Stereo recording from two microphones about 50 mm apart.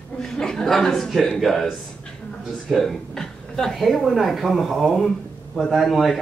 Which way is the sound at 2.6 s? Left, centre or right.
Centre.